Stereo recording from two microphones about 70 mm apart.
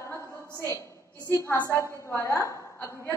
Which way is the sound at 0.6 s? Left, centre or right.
Left.